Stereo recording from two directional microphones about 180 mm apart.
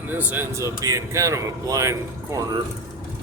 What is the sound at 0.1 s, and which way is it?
Speech, 10° right (ahead or behind).